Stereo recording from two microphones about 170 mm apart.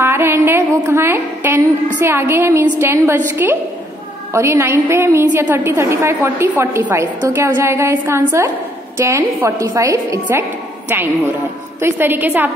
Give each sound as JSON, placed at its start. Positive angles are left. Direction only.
{"t": 0.0, "sound": "a woman's voice", "side_deg": -15}
{"t": 11.8, "sound": "a woman's voice", "side_deg": -10}